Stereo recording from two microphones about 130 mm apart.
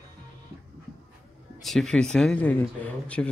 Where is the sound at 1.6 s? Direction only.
Centre (ahead or behind).